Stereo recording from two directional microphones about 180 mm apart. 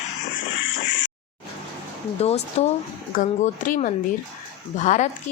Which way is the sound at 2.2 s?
35° left (ahead or behind).